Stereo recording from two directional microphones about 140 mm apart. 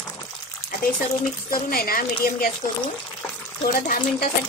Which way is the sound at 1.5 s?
90° left.